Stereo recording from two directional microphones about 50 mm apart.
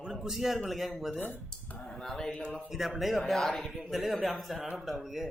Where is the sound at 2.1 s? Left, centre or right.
Centre.